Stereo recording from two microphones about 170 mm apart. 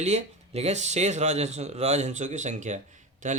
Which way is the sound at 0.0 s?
40° right (ahead or behind).